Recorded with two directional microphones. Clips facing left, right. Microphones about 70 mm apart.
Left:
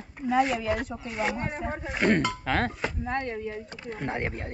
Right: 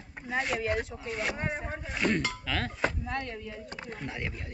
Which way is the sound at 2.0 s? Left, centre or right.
Left.